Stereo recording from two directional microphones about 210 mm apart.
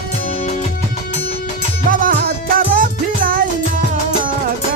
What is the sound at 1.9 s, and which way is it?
Music, 40° right (ahead or behind).